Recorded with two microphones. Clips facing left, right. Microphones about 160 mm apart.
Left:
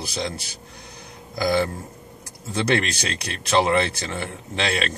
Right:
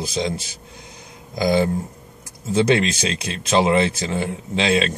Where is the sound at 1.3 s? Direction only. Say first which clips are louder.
Right 3 dB; 20° right (ahead or behind).